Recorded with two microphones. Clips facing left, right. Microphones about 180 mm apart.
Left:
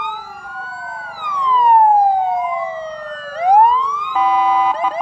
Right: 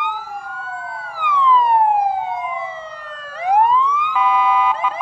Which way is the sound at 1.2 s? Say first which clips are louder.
Right 1 dB; 40° left (ahead or behind).